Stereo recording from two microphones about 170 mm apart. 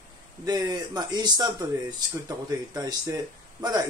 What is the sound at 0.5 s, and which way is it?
Speech, 25° right (ahead or behind).